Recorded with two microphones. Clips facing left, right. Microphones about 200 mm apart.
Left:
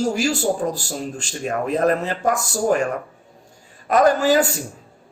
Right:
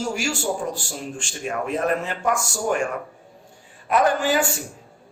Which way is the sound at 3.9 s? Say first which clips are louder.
Left 4 dB; 40° left (ahead or behind).